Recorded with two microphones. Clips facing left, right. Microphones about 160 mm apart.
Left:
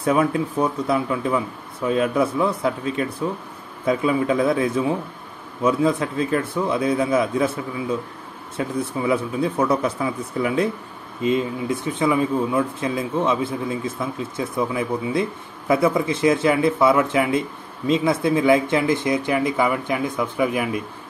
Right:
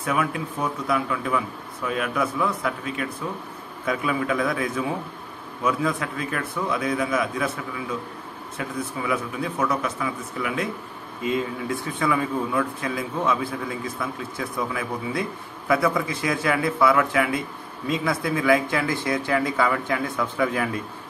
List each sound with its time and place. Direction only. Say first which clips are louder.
0.0 s speech: left 6 dB; 30° left (ahead or behind)
8.5 s speech: left 6 dB; 30° left (ahead or behind); by 20.8 s 15° left (ahead or behind)